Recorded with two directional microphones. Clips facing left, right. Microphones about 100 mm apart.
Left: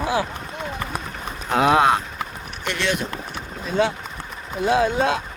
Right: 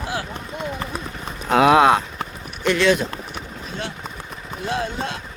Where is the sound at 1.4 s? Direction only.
90° right.